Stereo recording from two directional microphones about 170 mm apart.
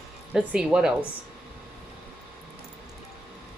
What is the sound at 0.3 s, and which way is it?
Speech, 5° right (ahead or behind).